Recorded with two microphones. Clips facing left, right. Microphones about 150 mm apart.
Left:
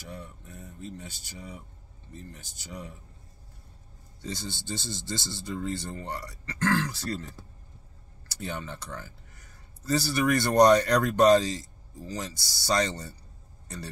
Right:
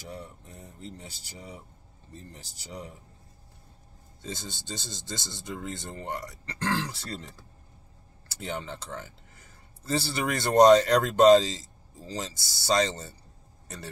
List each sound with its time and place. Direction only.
0.1 s speech: 25° right (ahead or behind)
4.2 s speech: 20° right (ahead or behind)
8.3 s speech: 25° right (ahead or behind)